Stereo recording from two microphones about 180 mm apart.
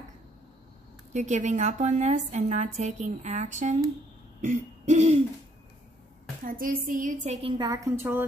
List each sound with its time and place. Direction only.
1.1 s a woman's voice: 40° right (ahead or behind)
4.4 s hoot: 40° right (ahead or behind)
6.4 s a woman's voice: 50° right (ahead or behind)
7.4 s a woman's voice: 25° right (ahead or behind)